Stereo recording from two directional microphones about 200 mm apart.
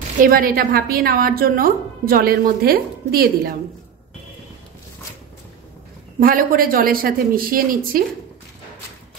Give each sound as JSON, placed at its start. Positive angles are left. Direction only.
{"t": 0.2, "sound": "a woman's voice", "side_deg": -45}
{"t": 6.1, "sound": "a woman's voice", "side_deg": -45}